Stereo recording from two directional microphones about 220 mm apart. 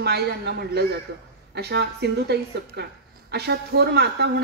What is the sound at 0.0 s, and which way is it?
Speech, 50° right (ahead or behind).